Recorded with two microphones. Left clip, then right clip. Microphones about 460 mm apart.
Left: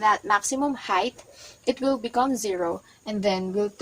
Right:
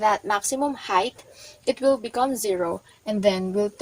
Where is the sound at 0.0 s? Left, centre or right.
Left.